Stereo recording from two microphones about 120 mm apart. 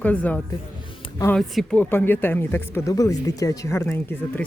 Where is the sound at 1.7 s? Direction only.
15° left (ahead or behind).